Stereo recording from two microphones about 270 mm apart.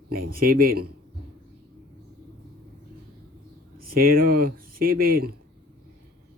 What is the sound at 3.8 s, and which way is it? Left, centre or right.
Speech, right.